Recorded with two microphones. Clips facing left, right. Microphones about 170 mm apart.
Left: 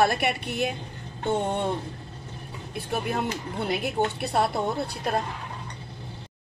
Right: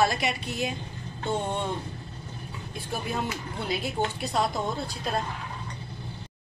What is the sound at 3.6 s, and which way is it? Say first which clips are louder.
A woman's voice: left 3 dB; 60° left (ahead or behind).